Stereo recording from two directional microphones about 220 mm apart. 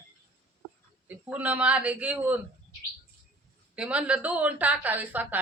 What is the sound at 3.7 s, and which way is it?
A woman's voice, 5° right (ahead or behind).